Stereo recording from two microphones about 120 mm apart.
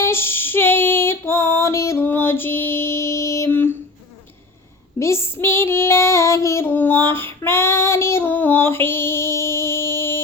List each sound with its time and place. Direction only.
0.0 s female singing: 20° left (ahead or behind)
4.9 s child singing: 20° left (ahead or behind)